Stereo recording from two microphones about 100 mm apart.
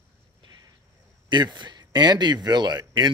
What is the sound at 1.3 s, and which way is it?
Speech, 50° right (ahead or behind).